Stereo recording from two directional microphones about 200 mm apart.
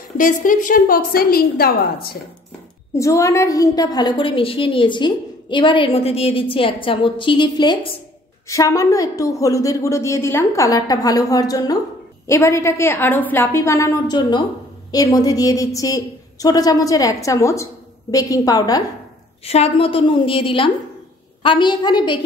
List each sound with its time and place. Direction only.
0.2 s a woman's voice: 40° left (ahead or behind)
3.0 s a woman's voice: 15° left (ahead or behind)
19.4 s a woman's voice: 30° left (ahead or behind)